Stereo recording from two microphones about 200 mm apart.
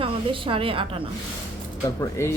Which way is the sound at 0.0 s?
25° right (ahead or behind).